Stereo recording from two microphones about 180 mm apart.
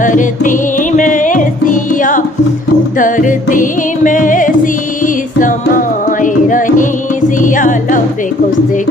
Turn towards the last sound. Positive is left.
turn(degrees=45)  # may be behind; listen again after turning